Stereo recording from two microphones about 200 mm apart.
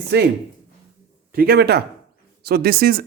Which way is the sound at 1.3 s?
50° right (ahead or behind).